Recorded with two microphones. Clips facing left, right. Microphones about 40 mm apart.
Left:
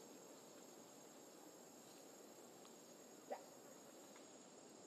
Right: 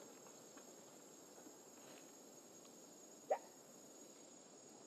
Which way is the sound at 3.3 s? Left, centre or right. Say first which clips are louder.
Right 10 dB; right.